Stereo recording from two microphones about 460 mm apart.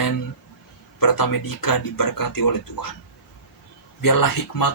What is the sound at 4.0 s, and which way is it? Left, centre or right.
Speech, left.